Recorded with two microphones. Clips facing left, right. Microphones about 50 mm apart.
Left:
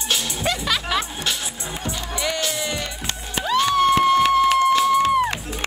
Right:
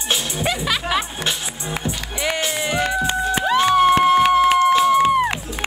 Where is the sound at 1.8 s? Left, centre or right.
Right.